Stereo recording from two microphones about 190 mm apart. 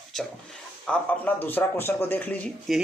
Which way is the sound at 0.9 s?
10° left (ahead or behind).